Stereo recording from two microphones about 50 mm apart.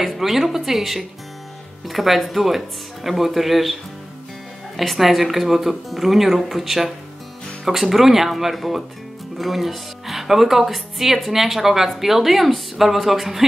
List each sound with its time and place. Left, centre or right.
0.0 s speech: centre
4.7 s speech: centre